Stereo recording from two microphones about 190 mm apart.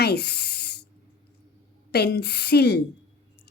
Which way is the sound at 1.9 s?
60° left (ahead or behind).